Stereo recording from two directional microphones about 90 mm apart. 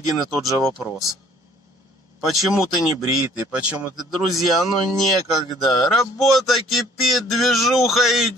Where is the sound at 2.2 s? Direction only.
Centre (ahead or behind).